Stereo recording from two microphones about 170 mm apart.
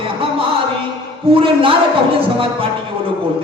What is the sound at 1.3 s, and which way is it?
Music, 30° right (ahead or behind).